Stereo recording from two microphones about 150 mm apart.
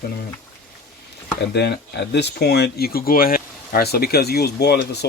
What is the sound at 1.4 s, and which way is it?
Speech, 90° left.